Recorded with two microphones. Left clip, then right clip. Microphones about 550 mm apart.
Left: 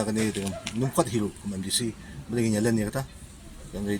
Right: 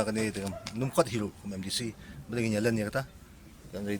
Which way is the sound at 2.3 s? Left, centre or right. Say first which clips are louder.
Left 3 dB; right.